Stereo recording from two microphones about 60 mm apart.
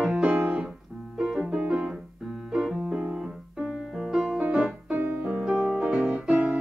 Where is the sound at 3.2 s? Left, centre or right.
Centre.